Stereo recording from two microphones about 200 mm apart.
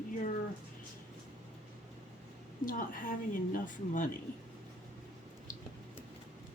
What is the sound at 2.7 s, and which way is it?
A woman's voice, 40° left (ahead or behind).